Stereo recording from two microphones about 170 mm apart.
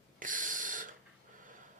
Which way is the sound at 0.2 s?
50° right (ahead or behind).